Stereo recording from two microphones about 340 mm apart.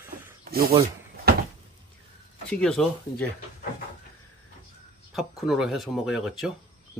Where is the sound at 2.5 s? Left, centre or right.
Centre.